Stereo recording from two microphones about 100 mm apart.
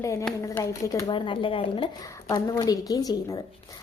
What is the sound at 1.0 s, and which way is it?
Speech, 55° left (ahead or behind).